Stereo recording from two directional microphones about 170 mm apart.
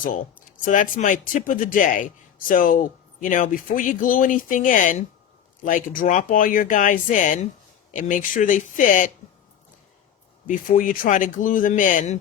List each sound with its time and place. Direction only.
0.6 s speech: 50° left (ahead or behind)
10.4 s speech: 55° left (ahead or behind)